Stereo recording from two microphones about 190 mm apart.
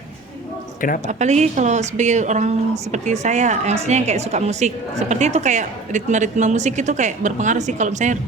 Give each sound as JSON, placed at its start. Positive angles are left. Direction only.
{"t": 0.8, "sound": "speech", "side_deg": 45}
{"t": 1.0, "sound": "speech", "side_deg": -35}